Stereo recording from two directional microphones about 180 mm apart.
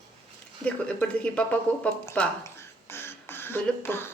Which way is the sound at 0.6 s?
5° left (ahead or behind).